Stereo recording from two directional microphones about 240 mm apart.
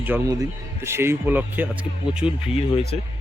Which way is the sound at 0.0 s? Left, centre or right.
Centre.